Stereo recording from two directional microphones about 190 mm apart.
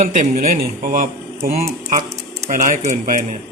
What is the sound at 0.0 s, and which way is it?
Speech, 45° right (ahead or behind).